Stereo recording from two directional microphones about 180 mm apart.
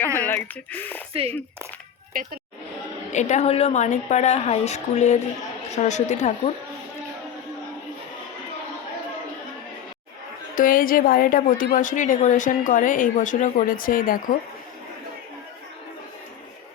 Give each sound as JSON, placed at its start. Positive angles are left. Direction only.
{"t": 0.2, "sound": "speech", "side_deg": 10}
{"t": 3.1, "sound": "a woman's voice", "side_deg": 40}
{"t": 10.5, "sound": "a woman's voice", "side_deg": 50}